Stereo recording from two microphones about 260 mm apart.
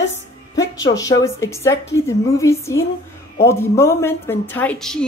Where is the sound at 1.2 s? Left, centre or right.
Centre.